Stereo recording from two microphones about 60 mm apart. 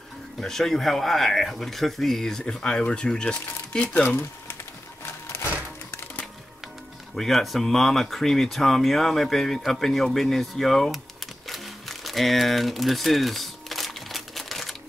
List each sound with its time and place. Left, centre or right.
0.4 s speech: centre
3.8 s speech: left
7.2 s speech: centre
11.4 s a sound: centre